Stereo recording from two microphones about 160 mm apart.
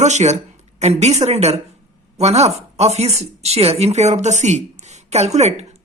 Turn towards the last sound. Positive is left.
turn(degrees=-45)  # may be behind; listen again after turning